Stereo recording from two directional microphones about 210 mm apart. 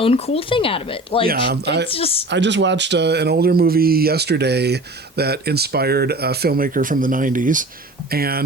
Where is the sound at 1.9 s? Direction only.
25° left (ahead or behind).